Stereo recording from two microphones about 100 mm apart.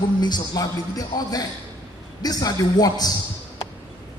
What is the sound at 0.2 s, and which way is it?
A man's voice, 45° left (ahead or behind).